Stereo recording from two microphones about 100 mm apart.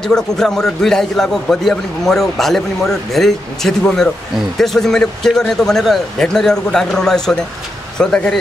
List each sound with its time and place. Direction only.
0.0 s a man's voice: 5° left (ahead or behind)